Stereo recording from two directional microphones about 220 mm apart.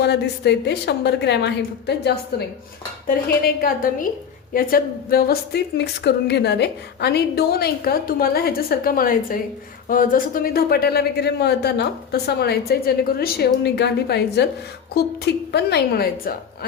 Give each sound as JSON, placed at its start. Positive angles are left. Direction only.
{"t": 0.0, "sound": "a woman's voice", "side_deg": 50}
{"t": 3.2, "sound": "a woman's voice", "side_deg": 45}